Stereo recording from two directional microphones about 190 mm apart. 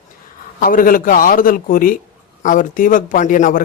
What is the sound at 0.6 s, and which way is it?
A man's voice, 45° left (ahead or behind).